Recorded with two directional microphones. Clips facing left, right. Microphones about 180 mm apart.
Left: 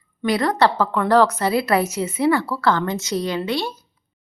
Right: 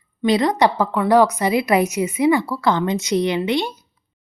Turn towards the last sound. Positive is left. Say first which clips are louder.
# right 3 dB
turn(degrees=-15)  # may be behind; listen again after turning